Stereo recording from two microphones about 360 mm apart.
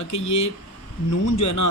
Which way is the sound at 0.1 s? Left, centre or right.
Left.